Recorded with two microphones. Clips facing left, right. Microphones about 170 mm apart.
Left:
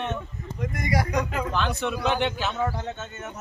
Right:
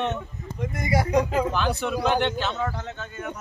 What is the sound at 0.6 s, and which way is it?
Speech, 25° right (ahead or behind).